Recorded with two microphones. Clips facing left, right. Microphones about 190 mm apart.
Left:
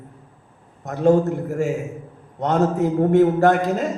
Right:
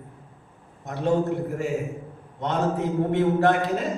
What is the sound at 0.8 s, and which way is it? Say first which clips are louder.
A man's voice: left 7 dB; 45° left (ahead or behind).